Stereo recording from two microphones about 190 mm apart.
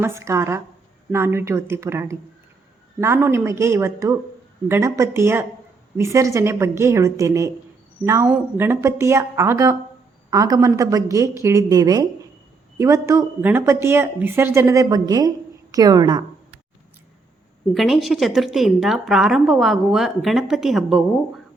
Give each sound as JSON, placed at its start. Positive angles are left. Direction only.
{"t": 0.0, "sound": "a woman's voice", "side_deg": -15}
{"t": 17.7, "sound": "a woman's voice", "side_deg": 0}